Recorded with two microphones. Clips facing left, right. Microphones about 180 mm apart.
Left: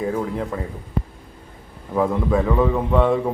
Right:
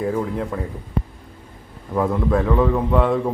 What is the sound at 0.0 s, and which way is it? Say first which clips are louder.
Speech: right 1 dB; centre (ahead or behind).